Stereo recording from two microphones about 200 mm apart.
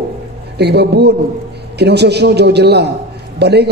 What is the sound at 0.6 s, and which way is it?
A man's voice, 55° right (ahead or behind).